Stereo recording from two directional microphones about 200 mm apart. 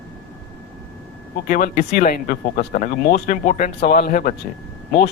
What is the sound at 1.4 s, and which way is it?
Speech, 40° left (ahead or behind).